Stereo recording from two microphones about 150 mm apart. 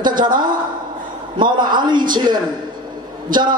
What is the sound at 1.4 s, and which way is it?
A man's voice, 30° right (ahead or behind).